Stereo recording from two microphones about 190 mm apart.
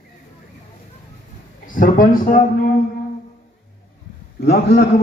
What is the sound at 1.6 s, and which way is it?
Speech, 45° left (ahead or behind).